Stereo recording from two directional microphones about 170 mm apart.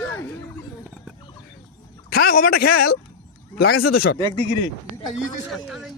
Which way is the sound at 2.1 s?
60° left (ahead or behind).